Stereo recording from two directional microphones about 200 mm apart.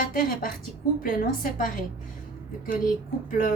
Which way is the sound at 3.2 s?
45° left (ahead or behind).